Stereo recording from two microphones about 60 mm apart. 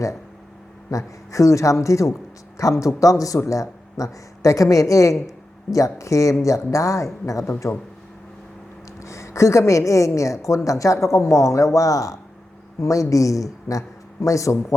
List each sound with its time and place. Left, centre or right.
0.9 s a woman's voice: left
9.0 s a woman's voice: left